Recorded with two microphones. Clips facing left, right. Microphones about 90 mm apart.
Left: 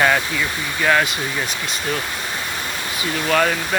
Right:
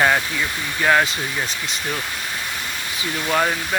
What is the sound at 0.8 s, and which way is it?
Speech, 30° right (ahead or behind).